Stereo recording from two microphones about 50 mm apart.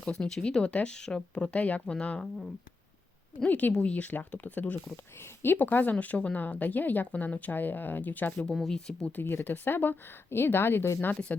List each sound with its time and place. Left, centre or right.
0.0 s speech: centre
1.5 s speech: left
1.9 s speech: centre
3.4 s speech: left
5.2 s speech: left
8.7 s speech: centre
9.1 s speech: left
11.1 s speech: left